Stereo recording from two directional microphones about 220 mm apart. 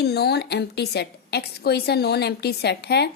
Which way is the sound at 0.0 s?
45° left (ahead or behind).